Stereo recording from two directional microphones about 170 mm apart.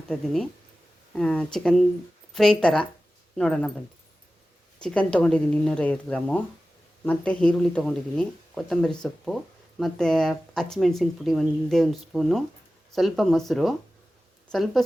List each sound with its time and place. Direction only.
1.1 s speech: 5° left (ahead or behind)
4.8 s speech: 5° left (ahead or behind)